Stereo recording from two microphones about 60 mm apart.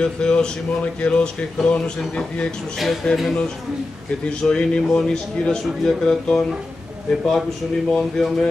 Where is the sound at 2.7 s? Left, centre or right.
Centre.